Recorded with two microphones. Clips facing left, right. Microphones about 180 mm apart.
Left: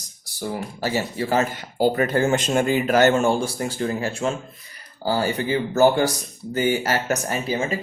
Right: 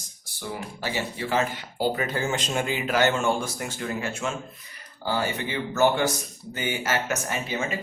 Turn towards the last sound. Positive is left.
turn(degrees=35)  # may be behind; listen again after turning